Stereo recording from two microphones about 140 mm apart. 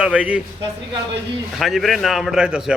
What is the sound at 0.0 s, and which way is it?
Speech, 10° right (ahead or behind).